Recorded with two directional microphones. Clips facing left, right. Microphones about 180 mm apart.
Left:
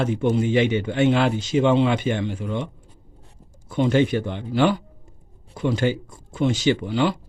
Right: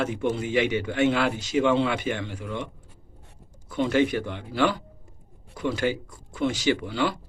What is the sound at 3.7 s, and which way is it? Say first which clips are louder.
A man's voice: left 3 dB; 25° left (ahead or behind).